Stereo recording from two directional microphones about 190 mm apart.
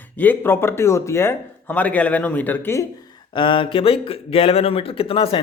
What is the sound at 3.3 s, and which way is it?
A man's voice, 25° left (ahead or behind).